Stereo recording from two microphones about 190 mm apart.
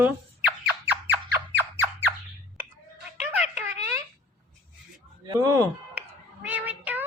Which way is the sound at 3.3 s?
5° right (ahead or behind).